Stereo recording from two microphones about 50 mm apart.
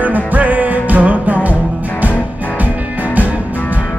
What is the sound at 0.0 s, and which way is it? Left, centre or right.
Music, right.